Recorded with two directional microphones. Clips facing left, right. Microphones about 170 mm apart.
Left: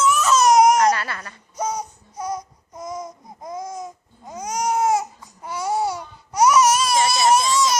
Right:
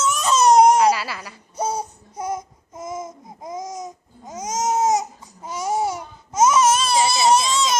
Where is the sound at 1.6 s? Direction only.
30° right (ahead or behind).